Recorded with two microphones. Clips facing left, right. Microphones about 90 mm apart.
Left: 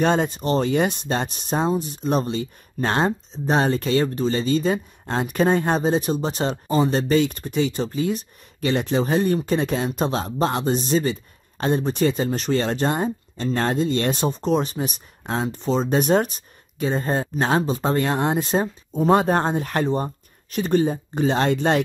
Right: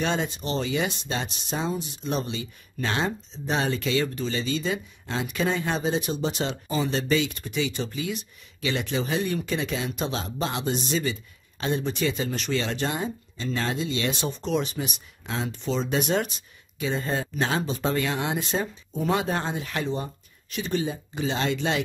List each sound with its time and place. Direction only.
0.0 s speech: 45° left (ahead or behind)